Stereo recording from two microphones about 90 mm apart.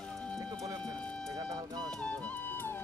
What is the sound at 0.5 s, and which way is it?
Music, 40° right (ahead or behind).